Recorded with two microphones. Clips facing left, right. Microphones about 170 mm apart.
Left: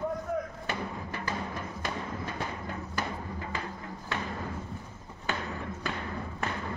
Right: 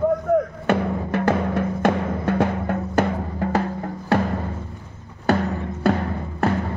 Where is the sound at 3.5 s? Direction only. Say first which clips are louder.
Right 14 dB; 70° right (ahead or behind).